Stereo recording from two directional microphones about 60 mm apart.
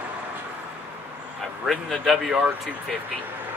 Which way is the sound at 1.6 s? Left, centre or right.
Centre.